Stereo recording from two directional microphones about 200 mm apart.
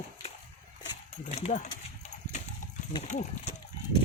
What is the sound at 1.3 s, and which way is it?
Speech, 35° left (ahead or behind).